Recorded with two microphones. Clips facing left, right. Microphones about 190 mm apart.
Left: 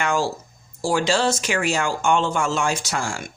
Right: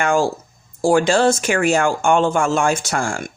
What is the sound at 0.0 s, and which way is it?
Speech, 50° right (ahead or behind).